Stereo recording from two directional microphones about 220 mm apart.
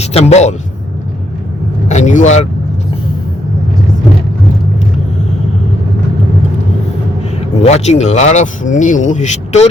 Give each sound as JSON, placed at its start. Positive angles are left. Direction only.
{"t": 0.0, "sound": "speech", "side_deg": 30}
{"t": 1.9, "sound": "speech", "side_deg": 35}
{"t": 7.6, "sound": "speech", "side_deg": 30}